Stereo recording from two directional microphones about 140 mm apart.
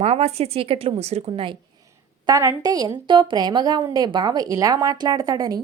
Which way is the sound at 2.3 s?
25° right (ahead or behind).